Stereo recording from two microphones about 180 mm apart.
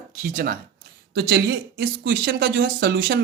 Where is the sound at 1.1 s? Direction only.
70° right (ahead or behind).